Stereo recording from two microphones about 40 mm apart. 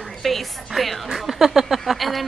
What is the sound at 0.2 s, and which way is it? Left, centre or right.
A woman's voice, centre.